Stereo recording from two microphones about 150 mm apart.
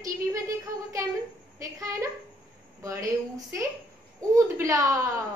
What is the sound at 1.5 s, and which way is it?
A woman's voice, 20° right (ahead or behind).